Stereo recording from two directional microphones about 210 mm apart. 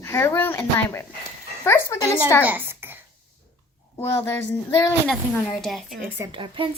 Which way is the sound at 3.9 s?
10° left (ahead or behind).